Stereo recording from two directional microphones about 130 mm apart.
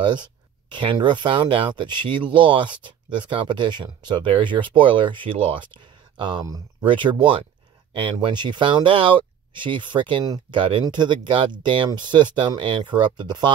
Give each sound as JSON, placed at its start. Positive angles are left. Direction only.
{"t": 0.0, "sound": "speech", "side_deg": -35}